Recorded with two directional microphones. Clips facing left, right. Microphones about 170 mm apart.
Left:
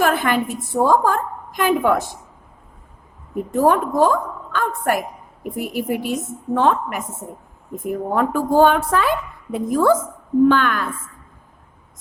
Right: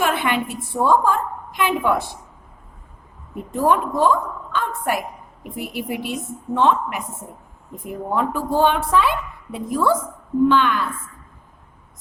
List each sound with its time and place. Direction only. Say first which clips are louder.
0.0 s a woman's voice: left 3 dB; 40° left (ahead or behind)
3.5 s a woman's voice: left 2 dB; 45° left (ahead or behind)